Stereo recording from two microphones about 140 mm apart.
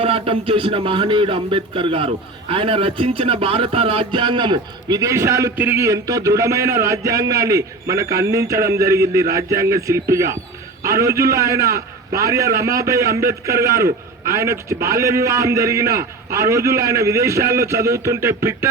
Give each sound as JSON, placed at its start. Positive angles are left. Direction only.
{"t": 0.0, "sound": "speech", "side_deg": -40}
{"t": 2.5, "sound": "music", "side_deg": -40}